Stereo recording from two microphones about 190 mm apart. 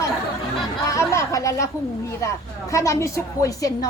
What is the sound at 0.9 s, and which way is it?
A woman's voice, 15° left (ahead or behind).